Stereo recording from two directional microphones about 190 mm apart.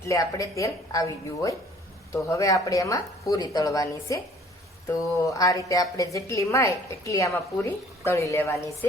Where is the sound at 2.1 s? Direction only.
15° left (ahead or behind).